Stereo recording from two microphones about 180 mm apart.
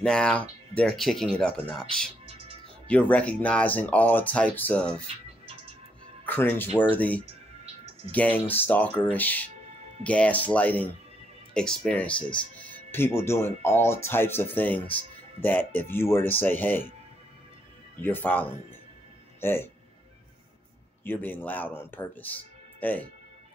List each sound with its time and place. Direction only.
0.0 s speech: 5° left (ahead or behind)
2.2 s music: 30° right (ahead or behind)
2.9 s speech: 10° left (ahead or behind)
6.2 s speech: 10° left (ahead or behind)
18.0 s speech: 10° left (ahead or behind)
21.0 s speech: 10° left (ahead or behind)